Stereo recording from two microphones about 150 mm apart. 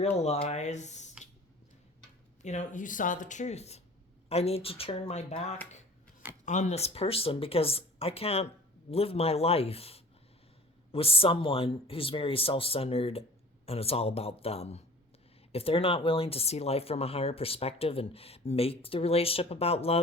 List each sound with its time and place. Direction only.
0.2 s speech: 45° left (ahead or behind)
2.4 s speech: 50° left (ahead or behind)